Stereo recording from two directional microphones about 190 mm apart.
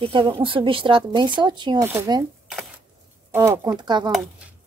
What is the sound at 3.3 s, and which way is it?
Speech, 15° right (ahead or behind).